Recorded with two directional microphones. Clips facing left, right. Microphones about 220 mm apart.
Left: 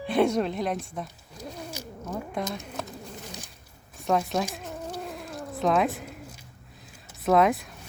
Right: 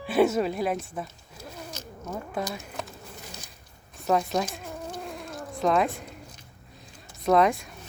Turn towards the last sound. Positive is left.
turn(degrees=0)  # may be behind; listen again after turning